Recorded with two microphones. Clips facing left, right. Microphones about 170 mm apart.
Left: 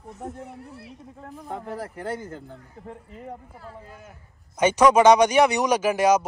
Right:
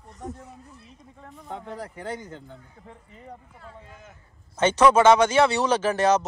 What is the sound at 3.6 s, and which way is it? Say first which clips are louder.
Speech: left 3 dB; 10° left (ahead or behind).